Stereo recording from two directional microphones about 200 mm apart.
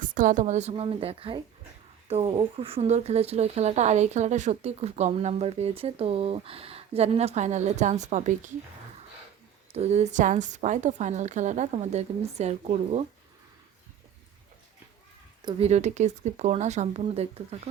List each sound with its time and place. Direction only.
0.0 s speech: 40° right (ahead or behind)
9.7 s speech: 35° right (ahead or behind)
15.4 s speech: 25° right (ahead or behind)